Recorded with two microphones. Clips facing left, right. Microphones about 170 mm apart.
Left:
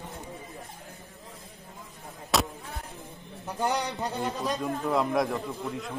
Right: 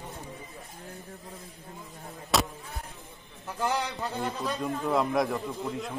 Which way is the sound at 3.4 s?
15° left (ahead or behind).